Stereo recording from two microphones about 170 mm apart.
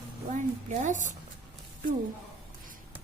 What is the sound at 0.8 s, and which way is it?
Speech, 50° right (ahead or behind).